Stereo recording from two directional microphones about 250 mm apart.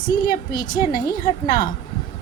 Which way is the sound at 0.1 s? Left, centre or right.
Centre.